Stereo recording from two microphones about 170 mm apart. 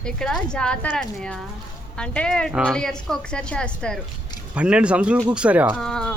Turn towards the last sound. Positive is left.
turn(degrees=5)  # may be behind; listen again after turning